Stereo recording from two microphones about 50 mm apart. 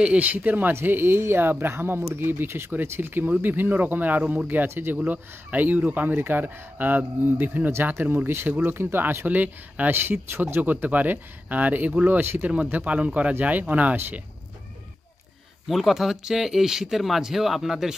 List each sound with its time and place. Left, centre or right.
0.0 s speech: right
0.7 s speech: right
1.7 s speech: right
4.9 s speech: right
9.9 s speech: right
12.7 s speech: right
15.7 s speech: centre